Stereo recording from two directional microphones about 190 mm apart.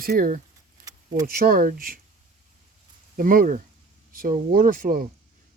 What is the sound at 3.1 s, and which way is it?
Speech, 50° right (ahead or behind).